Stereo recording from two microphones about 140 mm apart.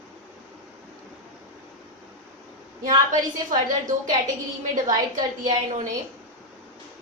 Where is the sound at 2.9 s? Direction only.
70° right (ahead or behind).